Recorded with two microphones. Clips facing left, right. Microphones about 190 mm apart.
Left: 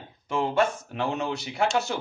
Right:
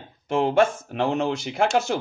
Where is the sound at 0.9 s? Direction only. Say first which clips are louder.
Right 5 dB; 85° right.